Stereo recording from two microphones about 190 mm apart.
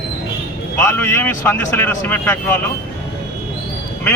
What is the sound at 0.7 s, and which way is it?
Speech, 15° left (ahead or behind).